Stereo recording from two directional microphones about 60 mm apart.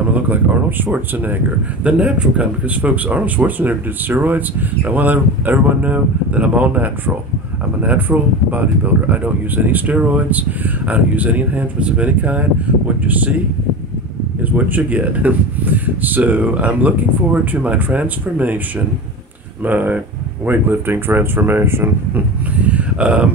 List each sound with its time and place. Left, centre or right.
0.1 s speech: right
1.9 s speech: centre
14.4 s speech: right
19.6 s speech: right
22.6 s speech: right